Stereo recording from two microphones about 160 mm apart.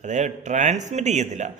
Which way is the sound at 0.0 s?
45° right (ahead or behind).